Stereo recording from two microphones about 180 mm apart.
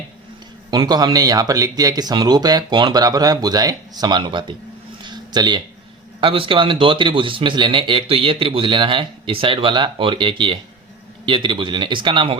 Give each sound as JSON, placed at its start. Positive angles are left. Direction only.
{"t": 0.7, "sound": "a man's voice", "side_deg": -20}
{"t": 5.0, "sound": "a sound", "side_deg": -25}
{"t": 6.1, "sound": "a man's voice", "side_deg": -30}